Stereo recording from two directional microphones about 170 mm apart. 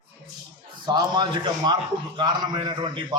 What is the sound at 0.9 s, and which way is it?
A man's voice, 25° right (ahead or behind).